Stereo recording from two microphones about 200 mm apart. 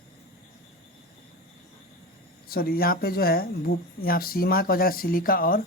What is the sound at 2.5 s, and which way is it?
Speech, 50° left (ahead or behind).